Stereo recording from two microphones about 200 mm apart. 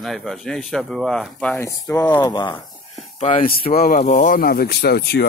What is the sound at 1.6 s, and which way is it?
Speech, 15° left (ahead or behind).